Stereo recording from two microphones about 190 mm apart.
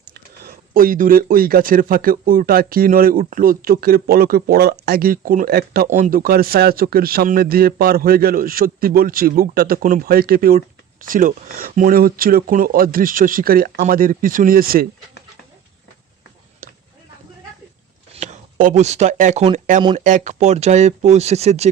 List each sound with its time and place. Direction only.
0.0 s speech: 55° right (ahead or behind)
16.6 s a sound: 45° right (ahead or behind)
18.1 s speech: 40° right (ahead or behind)